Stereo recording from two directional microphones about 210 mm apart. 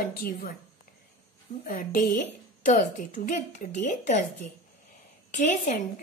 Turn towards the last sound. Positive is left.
turn(degrees=35)  # may be behind; listen again after turning